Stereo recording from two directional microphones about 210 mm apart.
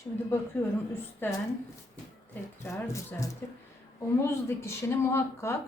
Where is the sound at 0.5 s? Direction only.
10° left (ahead or behind).